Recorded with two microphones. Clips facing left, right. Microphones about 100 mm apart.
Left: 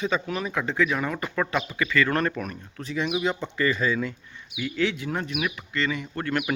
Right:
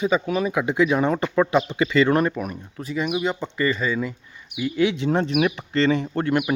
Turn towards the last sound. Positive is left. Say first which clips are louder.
# right 5 dB
turn(degrees=-15)  # may be behind; listen again after turning